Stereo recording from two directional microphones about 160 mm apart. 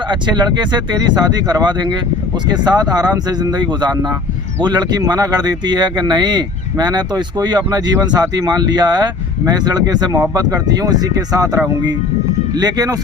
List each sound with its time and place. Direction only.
0.1 s speech: 30° right (ahead or behind)